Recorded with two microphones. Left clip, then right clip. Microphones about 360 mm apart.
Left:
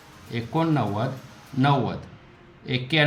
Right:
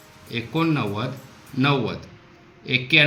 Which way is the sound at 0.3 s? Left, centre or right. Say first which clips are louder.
Right 1 dB; centre.